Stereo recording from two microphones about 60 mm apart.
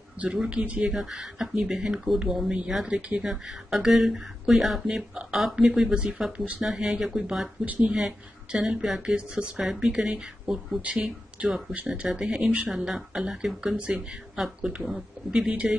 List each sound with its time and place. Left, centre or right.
0.5 s speech: centre
0.9 s speech: centre
5.9 s speech: centre
6.6 s speech: centre
7.6 s speech: right
8.5 s speech: centre
10.8 s speech: right
12.7 s speech: centre
13.7 s speech: centre